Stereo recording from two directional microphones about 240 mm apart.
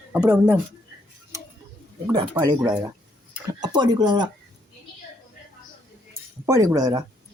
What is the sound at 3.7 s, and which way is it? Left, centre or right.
Speech, centre.